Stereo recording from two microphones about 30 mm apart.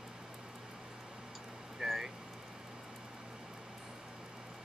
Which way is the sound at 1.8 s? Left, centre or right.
Right.